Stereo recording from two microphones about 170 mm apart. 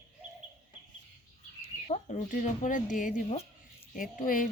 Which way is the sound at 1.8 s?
40° left (ahead or behind).